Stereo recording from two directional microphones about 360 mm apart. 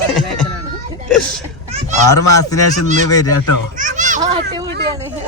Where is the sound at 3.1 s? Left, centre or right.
Centre.